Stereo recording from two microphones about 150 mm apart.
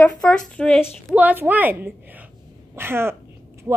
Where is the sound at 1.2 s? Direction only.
10° right (ahead or behind).